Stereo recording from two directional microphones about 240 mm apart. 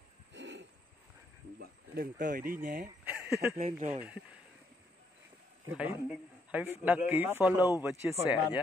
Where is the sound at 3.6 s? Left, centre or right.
Right.